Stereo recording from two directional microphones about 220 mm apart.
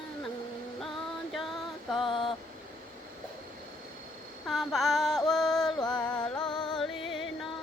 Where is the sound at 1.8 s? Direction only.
Centre (ahead or behind).